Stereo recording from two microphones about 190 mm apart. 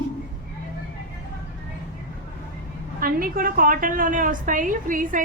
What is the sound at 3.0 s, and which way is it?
A woman's voice, 50° right (ahead or behind).